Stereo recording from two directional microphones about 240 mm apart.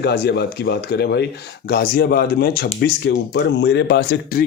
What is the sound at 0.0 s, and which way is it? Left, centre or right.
Speech, left.